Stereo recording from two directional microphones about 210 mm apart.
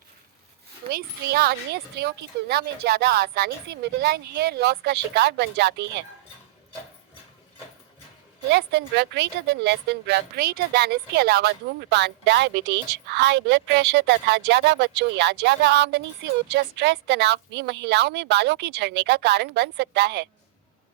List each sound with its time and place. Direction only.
0.9 s a woman's voice: 45° right (ahead or behind)
8.4 s a woman's voice: 55° right (ahead or behind)